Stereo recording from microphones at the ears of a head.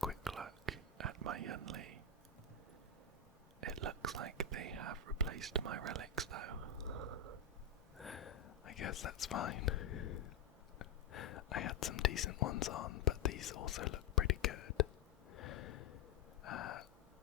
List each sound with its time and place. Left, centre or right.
0.4 s whispering: right
3.6 s whispering: right
8.2 s whispering: left
15.3 s a sound: left